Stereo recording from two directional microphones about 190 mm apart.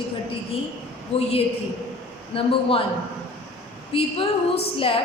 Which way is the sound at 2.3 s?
30° left (ahead or behind).